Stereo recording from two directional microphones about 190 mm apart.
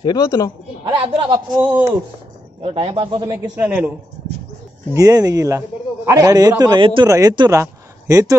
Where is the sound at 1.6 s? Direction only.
10° right (ahead or behind).